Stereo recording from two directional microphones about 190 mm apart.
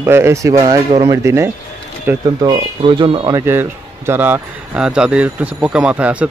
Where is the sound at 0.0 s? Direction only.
15° right (ahead or behind).